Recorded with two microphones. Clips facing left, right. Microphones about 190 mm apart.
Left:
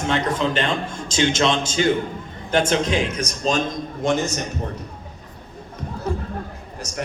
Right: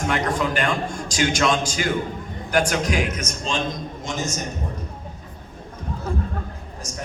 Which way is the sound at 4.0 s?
60° left (ahead or behind).